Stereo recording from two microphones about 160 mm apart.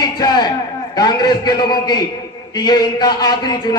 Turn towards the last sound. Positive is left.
turn(degrees=25)  # may be behind; listen again after turning